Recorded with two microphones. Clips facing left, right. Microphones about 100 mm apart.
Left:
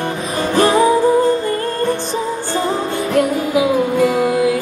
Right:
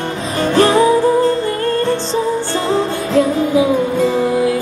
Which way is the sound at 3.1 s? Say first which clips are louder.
Right 2 dB; 15° left (ahead or behind).